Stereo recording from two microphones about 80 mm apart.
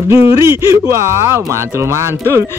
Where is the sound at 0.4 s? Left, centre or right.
Right.